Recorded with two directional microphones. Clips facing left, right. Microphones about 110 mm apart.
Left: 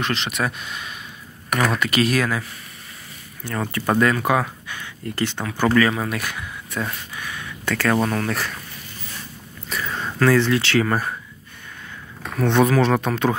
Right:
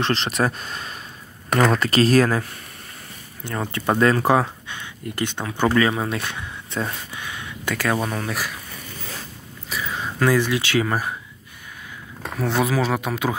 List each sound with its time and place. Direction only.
0.0 s speech: 35° right (ahead or behind)
3.4 s speech: 20° right (ahead or behind)
9.7 s speech: 5° right (ahead or behind)
12.4 s speech: 5° right (ahead or behind)